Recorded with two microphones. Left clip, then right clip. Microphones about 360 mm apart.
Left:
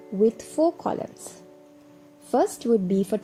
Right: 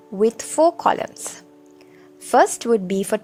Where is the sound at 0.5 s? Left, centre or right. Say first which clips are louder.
Right 7 dB; right.